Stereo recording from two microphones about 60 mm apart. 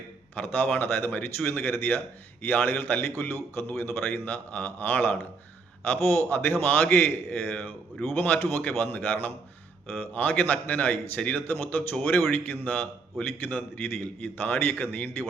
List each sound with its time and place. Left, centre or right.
0.3 s a man's voice: left